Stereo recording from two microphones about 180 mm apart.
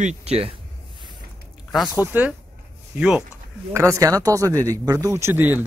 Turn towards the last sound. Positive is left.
turn(degrees=-10)  # may be behind; listen again after turning